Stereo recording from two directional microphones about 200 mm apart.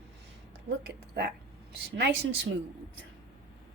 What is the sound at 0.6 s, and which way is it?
A woman's voice, 60° right (ahead or behind).